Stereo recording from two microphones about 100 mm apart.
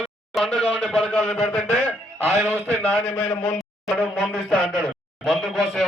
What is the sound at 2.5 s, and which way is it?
Speech, 25° right (ahead or behind).